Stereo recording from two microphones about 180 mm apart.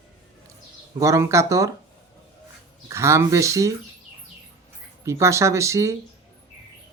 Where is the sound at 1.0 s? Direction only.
15° right (ahead or behind).